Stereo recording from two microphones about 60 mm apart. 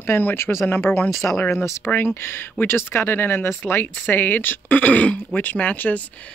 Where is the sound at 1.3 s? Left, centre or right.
Centre.